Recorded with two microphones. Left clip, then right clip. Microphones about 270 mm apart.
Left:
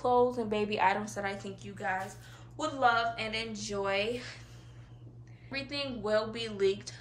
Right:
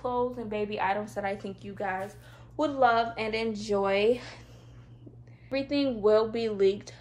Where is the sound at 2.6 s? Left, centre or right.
Centre.